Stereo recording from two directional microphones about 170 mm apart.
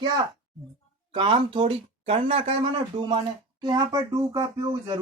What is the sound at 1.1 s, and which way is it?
Speech, 30° right (ahead or behind).